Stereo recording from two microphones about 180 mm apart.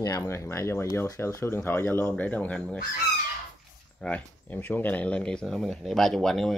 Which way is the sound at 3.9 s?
5° left (ahead or behind).